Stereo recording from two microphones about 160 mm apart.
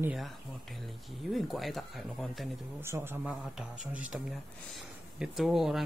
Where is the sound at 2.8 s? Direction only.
15° right (ahead or behind).